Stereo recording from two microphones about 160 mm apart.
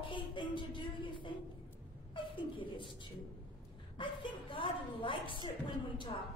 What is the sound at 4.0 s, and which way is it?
A woman's voice, 30° left (ahead or behind).